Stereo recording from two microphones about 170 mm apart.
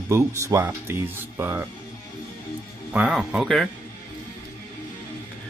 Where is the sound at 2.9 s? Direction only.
5° right (ahead or behind).